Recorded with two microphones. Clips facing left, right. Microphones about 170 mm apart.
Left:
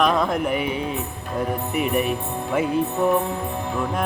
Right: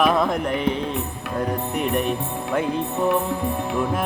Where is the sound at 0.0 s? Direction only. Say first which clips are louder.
Right 1 dB; 5° right (ahead or behind).